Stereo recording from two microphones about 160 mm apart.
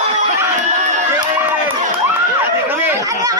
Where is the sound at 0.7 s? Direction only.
50° right (ahead or behind).